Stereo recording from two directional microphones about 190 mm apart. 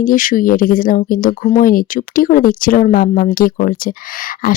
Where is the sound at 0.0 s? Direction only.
45° left (ahead or behind).